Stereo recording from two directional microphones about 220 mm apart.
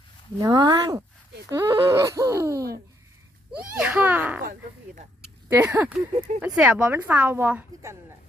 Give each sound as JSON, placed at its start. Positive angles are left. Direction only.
{"t": 0.3, "sound": "a woman's voice", "side_deg": -20}
{"t": 3.8, "sound": "a woman's voice", "side_deg": -10}
{"t": 5.5, "sound": "a woman's voice", "side_deg": -10}